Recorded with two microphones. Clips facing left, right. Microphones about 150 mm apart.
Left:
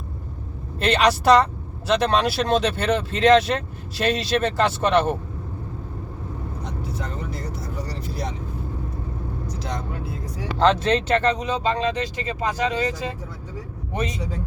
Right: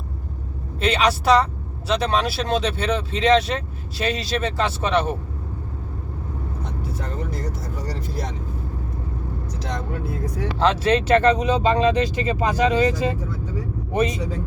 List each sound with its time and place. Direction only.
0.8 s speech: centre (ahead or behind)
7.0 s vehicle: 45° right (ahead or behind)
10.6 s speech: 5° right (ahead or behind)